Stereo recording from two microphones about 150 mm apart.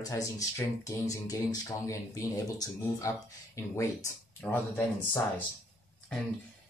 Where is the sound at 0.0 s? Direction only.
20° left (ahead or behind).